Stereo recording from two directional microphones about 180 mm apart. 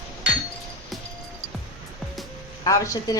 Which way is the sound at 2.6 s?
20° left (ahead or behind).